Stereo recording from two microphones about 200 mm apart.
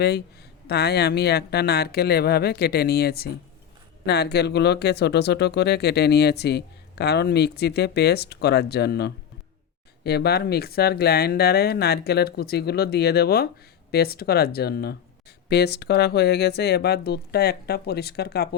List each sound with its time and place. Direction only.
0.7 s speech: 55° left (ahead or behind)